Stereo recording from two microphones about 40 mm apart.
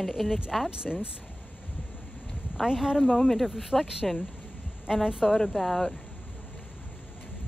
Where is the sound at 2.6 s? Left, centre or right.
Centre.